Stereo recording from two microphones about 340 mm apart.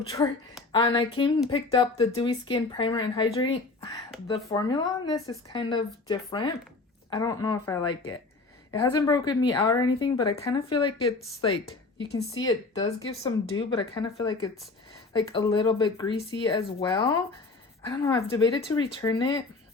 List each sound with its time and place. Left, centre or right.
0.7 s speech: centre
11.9 s speech: left
12.4 s speech: centre